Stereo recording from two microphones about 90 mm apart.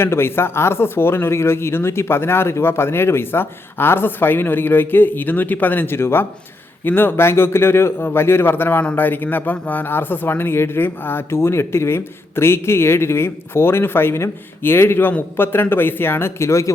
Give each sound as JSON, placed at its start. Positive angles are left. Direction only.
{"t": 0.0, "sound": "speech", "side_deg": 25}